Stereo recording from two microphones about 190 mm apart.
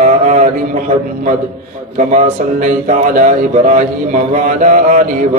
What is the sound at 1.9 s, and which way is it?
Speech, 40° right (ahead or behind).